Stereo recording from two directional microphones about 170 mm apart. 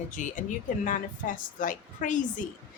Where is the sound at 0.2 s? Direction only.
45° left (ahead or behind).